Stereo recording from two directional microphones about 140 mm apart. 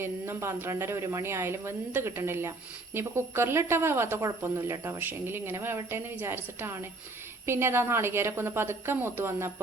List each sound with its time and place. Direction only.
0.0 s speech: 15° right (ahead or behind)